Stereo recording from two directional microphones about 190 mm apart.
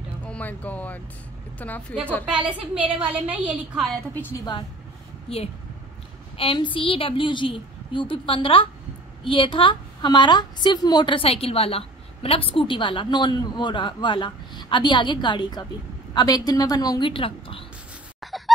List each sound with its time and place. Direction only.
0.2 s a woman's voice: 5° left (ahead or behind)
2.2 s a woman's voice: 5° right (ahead or behind)
6.3 s a woman's voice: 30° left (ahead or behind)
18.2 s fowl: centre (ahead or behind)